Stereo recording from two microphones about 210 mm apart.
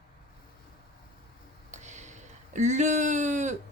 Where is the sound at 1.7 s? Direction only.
35° right (ahead or behind).